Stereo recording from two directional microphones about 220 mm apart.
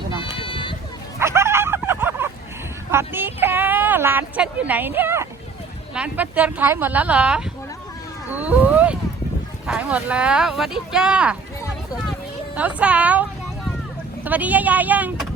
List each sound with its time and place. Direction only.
0.2 s run: 25° left (ahead or behind)
1.2 s a sound: 10° right (ahead or behind)
5.9 s a woman's voice: 5° right (ahead or behind)
8.3 s a sound: 5° right (ahead or behind)
9.6 s speech: 5° right (ahead or behind)
12.5 s a woman's voice: 5° right (ahead or behind)
14.3 s a woman's voice: 5° right (ahead or behind)